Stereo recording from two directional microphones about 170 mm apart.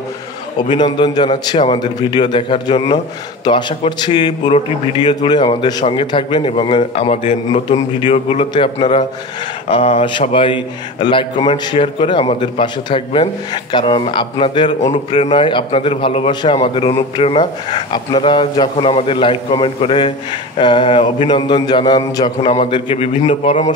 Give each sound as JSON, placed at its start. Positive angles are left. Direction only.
{"t": 0.7, "sound": "a man's voice", "side_deg": 25}
{"t": 14.8, "sound": "a man's voice", "side_deg": 40}
{"t": 15.3, "sound": "speech", "side_deg": 30}